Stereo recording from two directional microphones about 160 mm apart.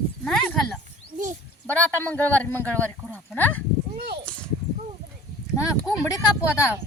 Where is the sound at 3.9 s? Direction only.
75° right (ahead or behind).